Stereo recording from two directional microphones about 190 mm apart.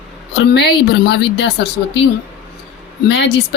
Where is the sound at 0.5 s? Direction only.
65° left (ahead or behind).